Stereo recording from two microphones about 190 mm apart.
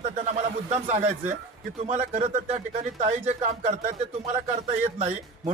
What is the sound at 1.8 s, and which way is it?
Speech, 35° right (ahead or behind).